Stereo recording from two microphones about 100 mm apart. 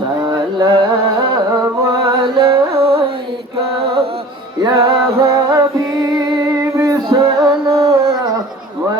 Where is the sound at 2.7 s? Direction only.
75° right (ahead or behind).